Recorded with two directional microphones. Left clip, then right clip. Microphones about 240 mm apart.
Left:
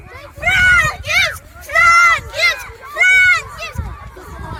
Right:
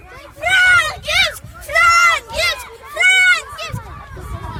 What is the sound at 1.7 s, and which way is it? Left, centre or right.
Run, right.